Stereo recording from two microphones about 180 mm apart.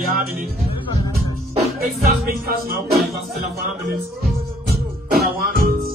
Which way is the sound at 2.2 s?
55° right (ahead or behind).